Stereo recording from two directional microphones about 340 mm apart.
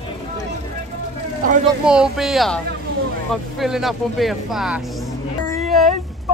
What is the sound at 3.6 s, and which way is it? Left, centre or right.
Speech, centre.